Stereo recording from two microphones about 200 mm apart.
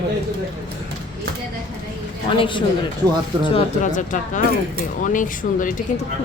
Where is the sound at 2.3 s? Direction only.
25° left (ahead or behind).